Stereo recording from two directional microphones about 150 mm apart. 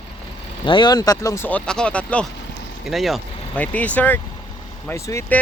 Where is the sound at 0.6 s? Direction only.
30° left (ahead or behind).